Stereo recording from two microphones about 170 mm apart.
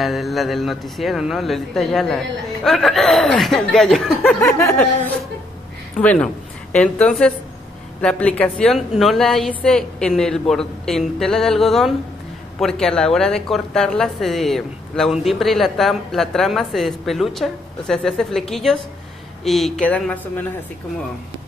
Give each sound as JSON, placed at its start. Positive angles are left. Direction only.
{"t": 0.0, "sound": "a woman's voice", "side_deg": 0}